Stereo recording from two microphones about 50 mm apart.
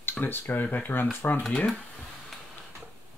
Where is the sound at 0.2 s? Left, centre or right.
Left.